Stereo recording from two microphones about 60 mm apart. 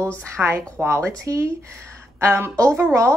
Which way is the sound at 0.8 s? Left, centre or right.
Right.